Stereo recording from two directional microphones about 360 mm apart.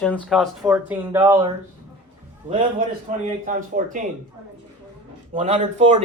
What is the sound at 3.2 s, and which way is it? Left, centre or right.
Speech, right.